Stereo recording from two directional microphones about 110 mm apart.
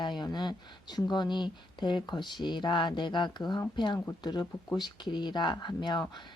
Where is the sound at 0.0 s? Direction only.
40° left (ahead or behind).